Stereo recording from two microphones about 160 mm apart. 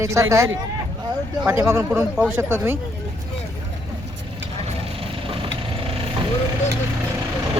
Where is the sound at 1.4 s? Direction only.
15° right (ahead or behind).